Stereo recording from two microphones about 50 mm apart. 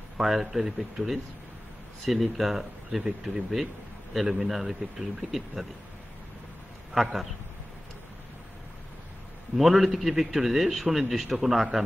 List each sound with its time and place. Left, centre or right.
0.2 s a man's voice: centre
3.0 s speech: centre
4.1 s a man's voice: centre
6.9 s a man's voice: centre
9.6 s a man's voice: centre